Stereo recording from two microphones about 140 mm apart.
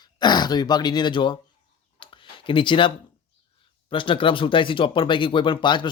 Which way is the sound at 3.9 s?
40° left (ahead or behind).